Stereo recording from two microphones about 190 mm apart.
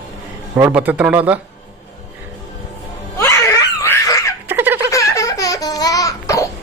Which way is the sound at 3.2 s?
15° left (ahead or behind).